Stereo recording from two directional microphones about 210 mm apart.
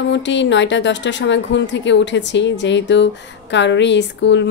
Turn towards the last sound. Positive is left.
turn(degrees=60)  # may be behind; listen again after turning